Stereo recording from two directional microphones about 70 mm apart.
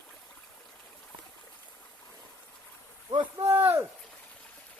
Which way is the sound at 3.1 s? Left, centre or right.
Right.